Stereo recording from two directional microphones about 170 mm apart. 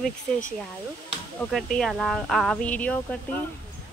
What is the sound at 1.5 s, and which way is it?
Speech, 5° left (ahead or behind).